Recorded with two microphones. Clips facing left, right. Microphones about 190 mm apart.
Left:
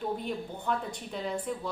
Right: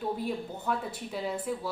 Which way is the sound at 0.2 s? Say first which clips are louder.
Right 2 dB; 5° right (ahead or behind).